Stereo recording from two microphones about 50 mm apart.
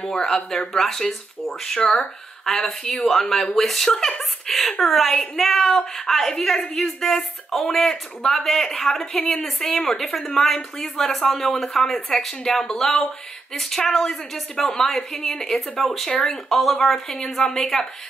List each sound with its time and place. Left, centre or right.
0.0 s a woman's voice: centre
1.8 s speech: centre
2.4 s a woman's voice: centre
4.2 s a sound: centre
4.8 s a woman's voice: centre
16.1 s speech: centre
16.4 s a woman's voice: centre